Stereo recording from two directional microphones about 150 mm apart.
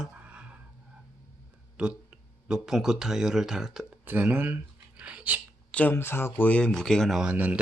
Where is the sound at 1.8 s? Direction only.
5° right (ahead or behind).